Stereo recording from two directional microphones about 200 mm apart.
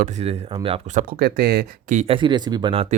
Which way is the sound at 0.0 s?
35° right (ahead or behind).